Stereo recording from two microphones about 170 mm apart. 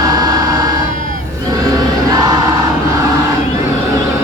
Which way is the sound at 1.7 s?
20° right (ahead or behind).